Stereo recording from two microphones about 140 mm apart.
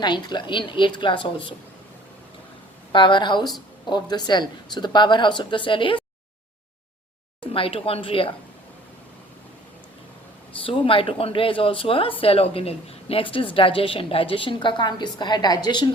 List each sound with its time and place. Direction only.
0.0 s speech: 30° left (ahead or behind)
2.9 s speech: 35° left (ahead or behind)
7.5 s speech: 40° left (ahead or behind)
10.7 s speech: 40° left (ahead or behind)